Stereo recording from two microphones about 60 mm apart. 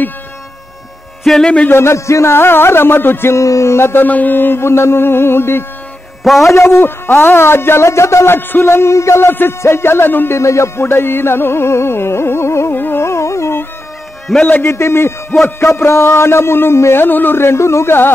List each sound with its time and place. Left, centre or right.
1.2 s speech: centre
1.7 s music: left
3.3 s speech: left
4.0 s music: left
6.4 s speech: left
8.4 s speech: left
9.3 s music: left
10.4 s speech: left
12.7 s carnatic music: left
13.0 s music: left
14.6 s speech: left